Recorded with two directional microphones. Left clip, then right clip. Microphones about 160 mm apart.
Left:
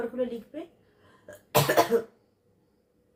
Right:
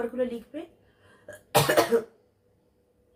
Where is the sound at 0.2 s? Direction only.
5° right (ahead or behind).